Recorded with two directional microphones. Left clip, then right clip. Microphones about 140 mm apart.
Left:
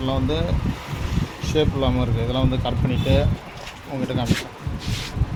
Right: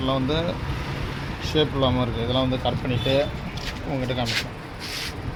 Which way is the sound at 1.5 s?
Centre (ahead or behind).